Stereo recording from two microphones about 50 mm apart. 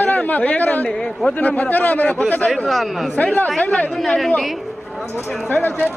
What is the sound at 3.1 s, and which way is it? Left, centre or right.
Speech, left.